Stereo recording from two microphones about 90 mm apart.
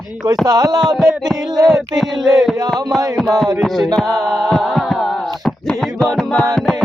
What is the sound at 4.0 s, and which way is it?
A capella, 5° left (ahead or behind).